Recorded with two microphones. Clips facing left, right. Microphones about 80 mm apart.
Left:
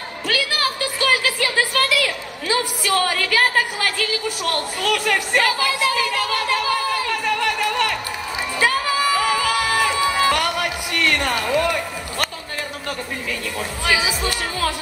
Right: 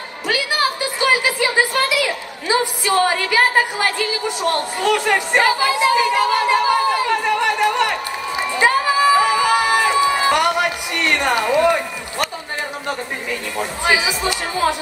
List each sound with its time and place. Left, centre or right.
0.3 s a sound: right
8.5 s music: right
13.6 s speech: right